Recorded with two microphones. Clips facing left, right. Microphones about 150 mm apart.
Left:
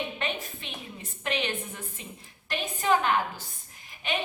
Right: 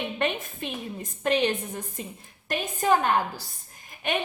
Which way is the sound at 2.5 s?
45° right (ahead or behind).